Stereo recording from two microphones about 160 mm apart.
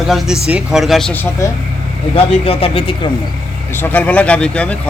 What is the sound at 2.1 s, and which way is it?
Speech, 35° left (ahead or behind).